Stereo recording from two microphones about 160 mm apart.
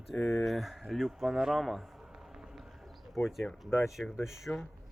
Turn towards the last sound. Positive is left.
turn(degrees=0)  # may be behind; listen again after turning